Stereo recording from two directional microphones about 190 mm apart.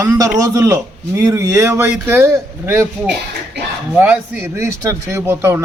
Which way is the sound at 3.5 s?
65° right (ahead or behind).